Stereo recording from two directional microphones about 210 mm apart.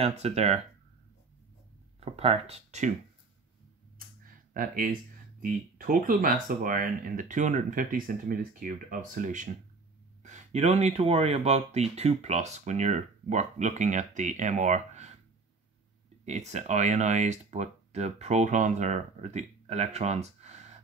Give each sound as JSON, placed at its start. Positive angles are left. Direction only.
{"t": 0.0, "sound": "speech", "side_deg": -30}
{"t": 2.0, "sound": "speech", "side_deg": -30}
{"t": 4.2, "sound": "a sound", "side_deg": -40}
{"t": 5.4, "sound": "speech", "side_deg": -40}
{"t": 16.3, "sound": "speech", "side_deg": -35}